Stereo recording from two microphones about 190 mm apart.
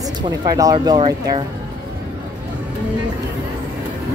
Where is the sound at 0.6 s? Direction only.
20° right (ahead or behind).